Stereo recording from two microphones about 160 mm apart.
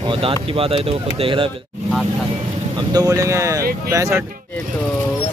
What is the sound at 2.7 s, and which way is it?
Speech, 25° right (ahead or behind).